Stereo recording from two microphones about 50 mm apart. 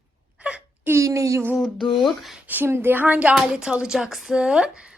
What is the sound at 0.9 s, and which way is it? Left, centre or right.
Speech, right.